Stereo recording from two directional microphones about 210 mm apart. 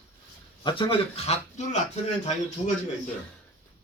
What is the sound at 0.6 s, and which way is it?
A man's voice, 25° left (ahead or behind).